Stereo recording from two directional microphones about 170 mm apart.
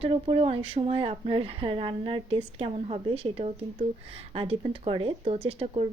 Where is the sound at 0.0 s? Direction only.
35° right (ahead or behind).